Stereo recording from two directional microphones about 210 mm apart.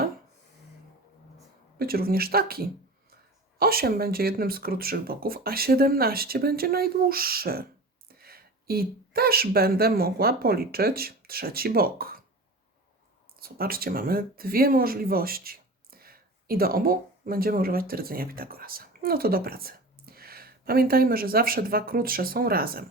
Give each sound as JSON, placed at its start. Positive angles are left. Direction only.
{"t": 1.8, "sound": "speech", "side_deg": -45}
{"t": 13.4, "sound": "speech", "side_deg": -45}